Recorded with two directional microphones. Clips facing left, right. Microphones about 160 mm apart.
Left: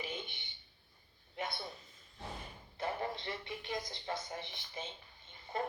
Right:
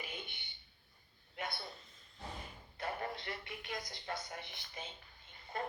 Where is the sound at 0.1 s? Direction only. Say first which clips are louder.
Left 4 dB; 25° left (ahead or behind).